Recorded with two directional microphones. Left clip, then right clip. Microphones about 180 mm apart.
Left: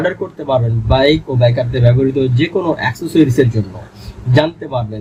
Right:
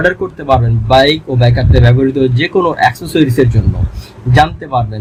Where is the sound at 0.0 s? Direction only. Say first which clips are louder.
Right 5 dB; 50° right (ahead or behind).